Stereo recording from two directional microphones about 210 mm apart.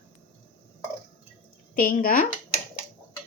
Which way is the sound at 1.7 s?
40° left (ahead or behind).